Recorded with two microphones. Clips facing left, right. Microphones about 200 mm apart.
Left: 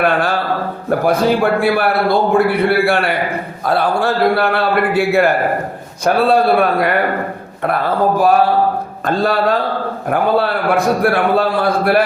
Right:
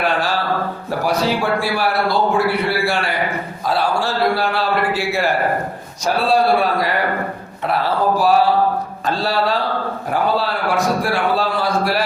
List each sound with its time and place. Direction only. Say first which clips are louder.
0.0 s a man's voice: left 4 dB; 55° left (ahead or behind)